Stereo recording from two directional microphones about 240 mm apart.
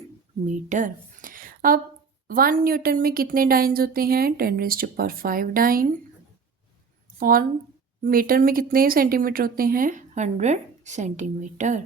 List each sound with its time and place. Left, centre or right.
0.4 s a woman's voice: right
7.2 s speech: right